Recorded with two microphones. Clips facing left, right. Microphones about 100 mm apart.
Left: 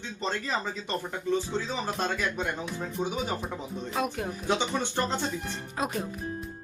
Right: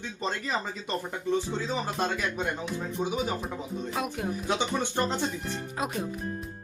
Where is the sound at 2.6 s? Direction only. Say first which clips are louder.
Right 1 dB; 5° right (ahead or behind).